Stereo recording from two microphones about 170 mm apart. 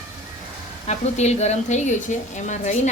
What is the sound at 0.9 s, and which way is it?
A woman's voice, 40° left (ahead or behind).